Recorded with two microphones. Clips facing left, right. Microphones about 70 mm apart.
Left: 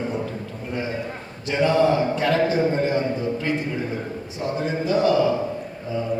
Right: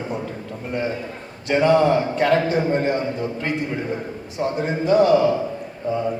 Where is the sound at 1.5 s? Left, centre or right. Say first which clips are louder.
Right 3 dB; right.